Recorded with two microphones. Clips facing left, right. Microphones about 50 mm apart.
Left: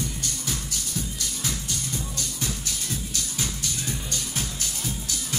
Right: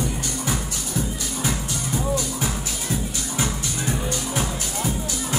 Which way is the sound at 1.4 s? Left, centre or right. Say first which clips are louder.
Right 6 dB; centre.